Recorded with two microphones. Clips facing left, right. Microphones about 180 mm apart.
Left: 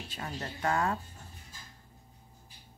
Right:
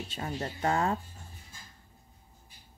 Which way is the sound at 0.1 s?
25° right (ahead or behind).